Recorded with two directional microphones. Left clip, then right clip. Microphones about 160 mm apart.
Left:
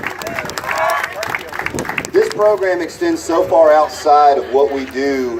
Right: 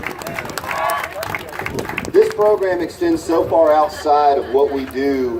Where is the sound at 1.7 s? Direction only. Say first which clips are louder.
Right 1 dB; 55° left (ahead or behind).